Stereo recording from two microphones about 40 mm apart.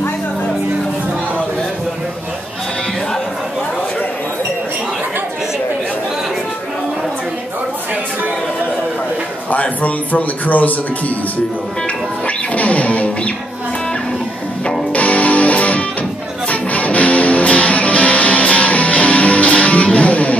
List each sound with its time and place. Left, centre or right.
9.5 s speech: left
12.5 s music: left
14.9 s music: left